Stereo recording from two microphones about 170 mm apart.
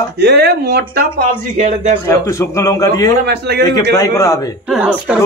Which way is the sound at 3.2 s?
75° right (ahead or behind).